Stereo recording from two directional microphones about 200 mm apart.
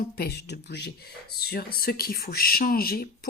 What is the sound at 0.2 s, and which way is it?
Speech, 55° left (ahead or behind).